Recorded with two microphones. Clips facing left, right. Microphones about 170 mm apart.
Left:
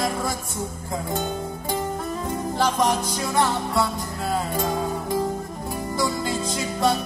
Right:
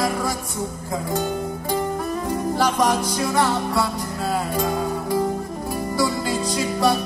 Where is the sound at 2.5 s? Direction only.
20° left (ahead or behind).